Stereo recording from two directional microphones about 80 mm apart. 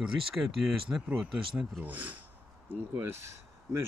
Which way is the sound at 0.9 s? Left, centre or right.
Centre.